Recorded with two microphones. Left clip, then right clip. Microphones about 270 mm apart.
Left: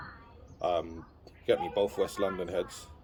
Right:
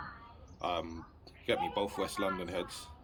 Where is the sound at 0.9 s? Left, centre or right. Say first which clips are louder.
Left 1 dB; right.